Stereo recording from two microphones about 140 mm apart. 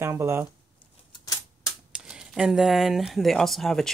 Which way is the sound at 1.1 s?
30° left (ahead or behind).